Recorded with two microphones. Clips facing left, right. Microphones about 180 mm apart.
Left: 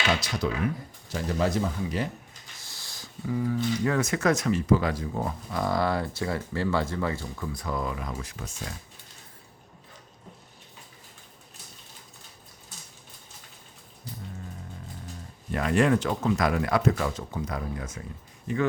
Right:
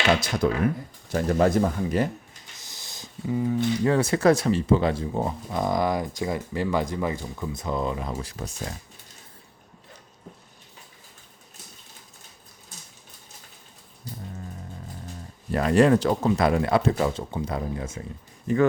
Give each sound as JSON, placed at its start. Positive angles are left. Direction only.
{"t": 0.1, "sound": "speech", "side_deg": -50}
{"t": 2.6, "sound": "speech", "side_deg": -20}
{"t": 15.5, "sound": "speech", "side_deg": -35}
{"t": 18.5, "sound": "speech", "side_deg": -40}